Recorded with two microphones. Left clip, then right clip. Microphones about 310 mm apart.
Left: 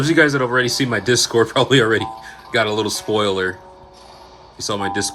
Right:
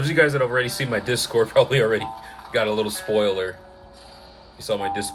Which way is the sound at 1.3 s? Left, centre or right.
Left.